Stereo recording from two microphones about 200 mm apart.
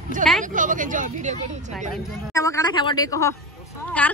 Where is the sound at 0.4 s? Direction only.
40° right (ahead or behind).